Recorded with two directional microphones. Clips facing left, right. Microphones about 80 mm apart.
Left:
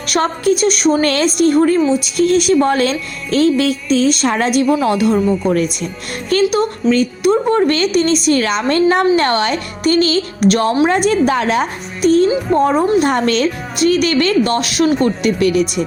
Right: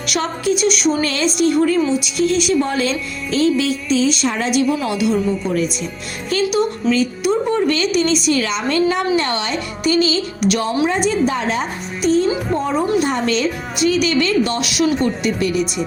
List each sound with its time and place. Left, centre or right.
0.1 s a woman's voice: left
10.8 s a woman's voice: left
15.0 s a woman's voice: left